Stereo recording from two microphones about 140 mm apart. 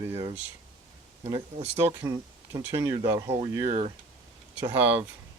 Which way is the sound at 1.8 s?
20° right (ahead or behind).